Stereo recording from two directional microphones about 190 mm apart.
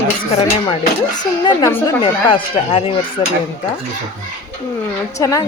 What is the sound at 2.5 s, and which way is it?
Speech, 30° left (ahead or behind).